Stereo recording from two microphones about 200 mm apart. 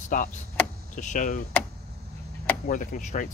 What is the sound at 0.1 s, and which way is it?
Speech, 40° left (ahead or behind).